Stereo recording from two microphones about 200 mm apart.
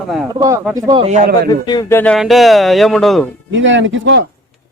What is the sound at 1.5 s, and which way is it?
Speech, 20° left (ahead or behind).